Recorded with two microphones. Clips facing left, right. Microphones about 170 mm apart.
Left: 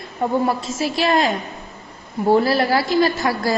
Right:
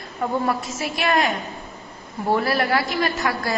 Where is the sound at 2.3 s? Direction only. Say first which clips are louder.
Left 3 dB; 30° left (ahead or behind).